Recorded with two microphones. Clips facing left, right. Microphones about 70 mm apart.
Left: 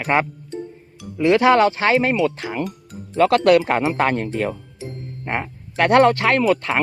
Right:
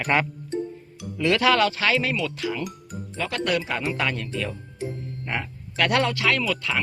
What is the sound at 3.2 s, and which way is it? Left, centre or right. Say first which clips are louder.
Speech: left 12 dB; left.